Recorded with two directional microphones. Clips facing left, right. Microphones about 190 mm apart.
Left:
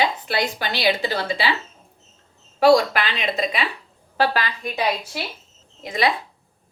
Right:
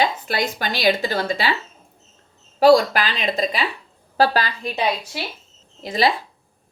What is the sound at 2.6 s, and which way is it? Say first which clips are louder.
A woman's voice: right 2 dB; 40° right (ahead or behind).